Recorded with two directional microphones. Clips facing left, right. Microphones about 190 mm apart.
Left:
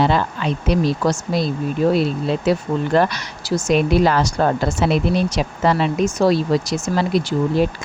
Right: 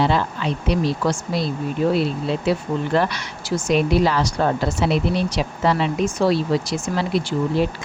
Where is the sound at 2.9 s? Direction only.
40° left (ahead or behind).